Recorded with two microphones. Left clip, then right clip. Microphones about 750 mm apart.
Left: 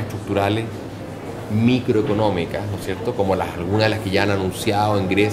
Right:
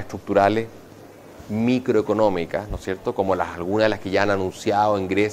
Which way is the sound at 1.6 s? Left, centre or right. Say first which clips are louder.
Left 1 dB; right.